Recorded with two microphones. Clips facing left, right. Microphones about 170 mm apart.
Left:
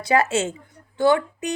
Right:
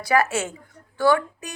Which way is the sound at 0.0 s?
25° left (ahead or behind).